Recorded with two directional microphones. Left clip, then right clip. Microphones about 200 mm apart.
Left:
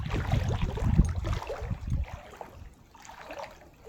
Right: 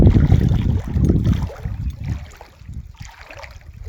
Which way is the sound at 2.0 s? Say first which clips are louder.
Right 7 dB; 55° right (ahead or behind).